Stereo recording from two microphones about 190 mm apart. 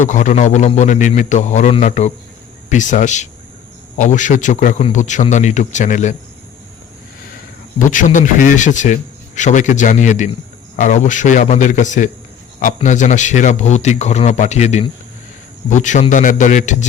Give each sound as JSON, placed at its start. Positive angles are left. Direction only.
{"t": 0.0, "sound": "speech", "side_deg": 40}
{"t": 7.8, "sound": "speech", "side_deg": 45}